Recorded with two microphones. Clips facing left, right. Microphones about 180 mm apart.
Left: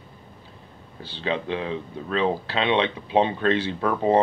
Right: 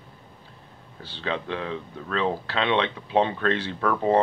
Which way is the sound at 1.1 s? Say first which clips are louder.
Left 3 dB; 15° left (ahead or behind).